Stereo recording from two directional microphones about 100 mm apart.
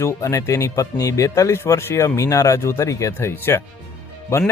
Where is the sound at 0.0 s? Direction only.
30° left (ahead or behind).